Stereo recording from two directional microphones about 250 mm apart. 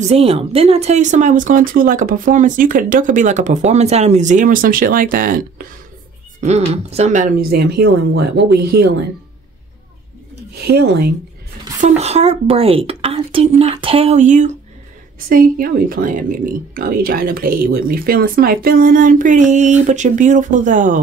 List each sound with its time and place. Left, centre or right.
0.0 s speech: right
10.5 s speech: right
11.8 s a woman's voice: right